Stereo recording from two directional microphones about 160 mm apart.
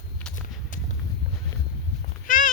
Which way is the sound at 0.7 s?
55° left (ahead or behind).